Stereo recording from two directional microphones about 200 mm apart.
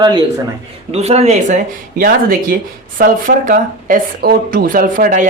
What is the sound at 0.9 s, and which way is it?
Speech, 30° right (ahead or behind).